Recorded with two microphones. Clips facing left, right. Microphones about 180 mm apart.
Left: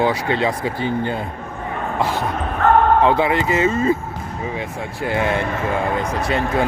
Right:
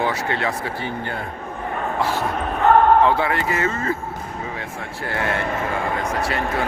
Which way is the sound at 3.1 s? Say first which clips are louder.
Left 3 dB; 20° left (ahead or behind).